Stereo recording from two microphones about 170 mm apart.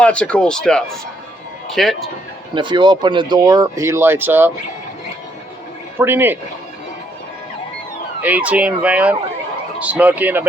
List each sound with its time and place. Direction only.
0.0 s speech: 5° left (ahead or behind)
2.6 s speech: 25° right (ahead or behind); by 4.5 s 10° right (ahead or behind)
6.0 s speech: 10° right (ahead or behind)
8.2 s speech: 10° right (ahead or behind)